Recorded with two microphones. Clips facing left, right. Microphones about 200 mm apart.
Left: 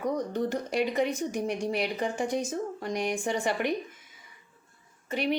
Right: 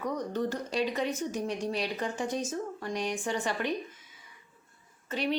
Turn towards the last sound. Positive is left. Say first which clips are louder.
# left 2 dB
turn(degrees=10)  # may be behind; listen again after turning